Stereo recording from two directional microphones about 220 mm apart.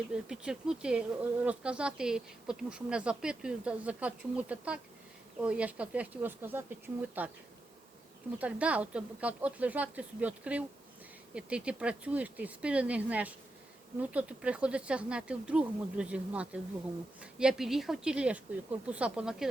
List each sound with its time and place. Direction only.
0.1 s a woman's voice: 5° right (ahead or behind)
8.4 s a woman's voice: 5° right (ahead or behind)